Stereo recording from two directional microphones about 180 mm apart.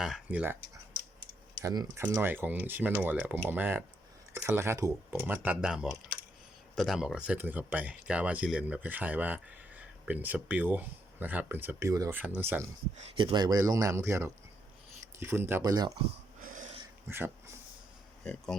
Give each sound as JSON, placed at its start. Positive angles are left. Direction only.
{"t": 0.0, "sound": "speech", "side_deg": -5}
{"t": 1.6, "sound": "speech", "side_deg": -20}
{"t": 13.1, "sound": "speech", "side_deg": -25}
{"t": 17.1, "sound": "speech", "side_deg": -15}